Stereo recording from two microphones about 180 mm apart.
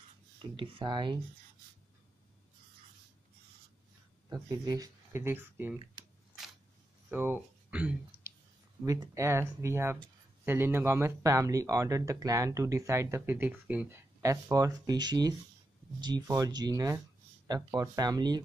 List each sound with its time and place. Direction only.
0.4 s speech: 25° right (ahead or behind)
4.3 s speech: 20° right (ahead or behind)
7.1 s speech: 10° right (ahead or behind)